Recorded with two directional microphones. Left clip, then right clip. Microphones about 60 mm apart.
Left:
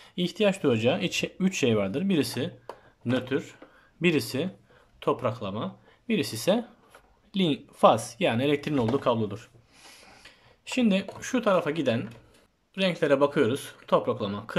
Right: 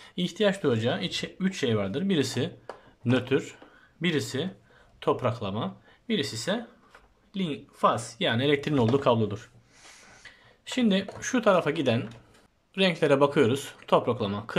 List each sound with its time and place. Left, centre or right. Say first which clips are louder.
0.0 s speech: left 1 dB; centre; by 1.3 s left
1.4 s speech: left 2 dB; left
1.8 s speech: left 1 dB; centre
4.0 s speech: left 3 dB; left
5.0 s speech: right 1 dB; centre
6.0 s speech: left 1 dB; left
6.3 s speech: left 5 dB; left
7.3 s speech: left 6 dB; left
8.4 s speech: right 1 dB; centre
8.7 s speech: right 2 dB; centre
9.9 s a sound: right 1 dB; centre
11.1 s speech: right 3 dB; centre